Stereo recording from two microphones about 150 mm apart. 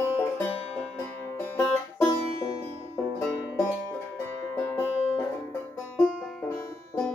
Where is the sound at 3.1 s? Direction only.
15° left (ahead or behind).